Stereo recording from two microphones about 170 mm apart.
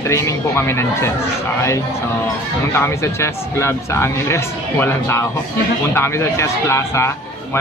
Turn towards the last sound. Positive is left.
turn(degrees=15)  # may be behind; listen again after turning